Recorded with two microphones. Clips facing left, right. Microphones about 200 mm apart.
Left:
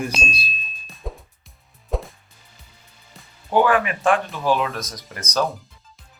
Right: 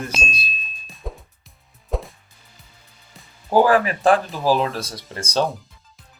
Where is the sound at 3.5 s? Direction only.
35° right (ahead or behind).